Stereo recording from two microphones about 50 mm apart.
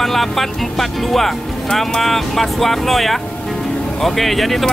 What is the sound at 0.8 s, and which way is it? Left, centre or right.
Speech, centre.